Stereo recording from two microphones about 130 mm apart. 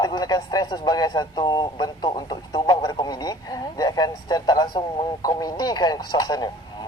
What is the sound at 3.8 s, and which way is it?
Speech, 30° left (ahead or behind).